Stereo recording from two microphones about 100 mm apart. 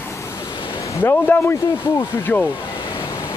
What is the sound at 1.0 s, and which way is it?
Speech, 20° left (ahead or behind).